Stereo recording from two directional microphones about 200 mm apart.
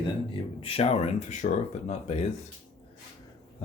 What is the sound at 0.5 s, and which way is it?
Speech, 30° left (ahead or behind).